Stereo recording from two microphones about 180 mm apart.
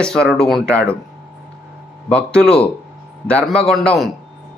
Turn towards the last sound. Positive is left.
turn(degrees=0)  # may be behind; listen again after turning